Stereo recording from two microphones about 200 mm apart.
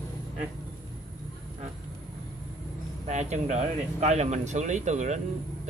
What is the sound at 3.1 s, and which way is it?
Speech, 35° right (ahead or behind).